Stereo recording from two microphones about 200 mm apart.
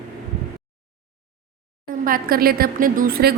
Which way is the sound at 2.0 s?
45° right (ahead or behind).